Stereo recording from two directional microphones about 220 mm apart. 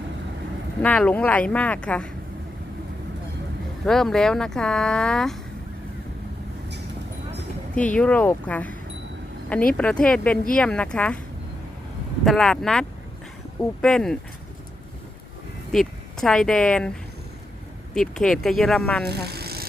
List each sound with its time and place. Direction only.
0.8 s speech: 5° left (ahead or behind)
3.8 s speech: centre (ahead or behind)
7.8 s speech: 5° left (ahead or behind)
9.7 s speech: 5° left (ahead or behind)
12.2 s speech: centre (ahead or behind)
15.7 s speech: centre (ahead or behind)
19.0 s vehicle: 45° right (ahead or behind)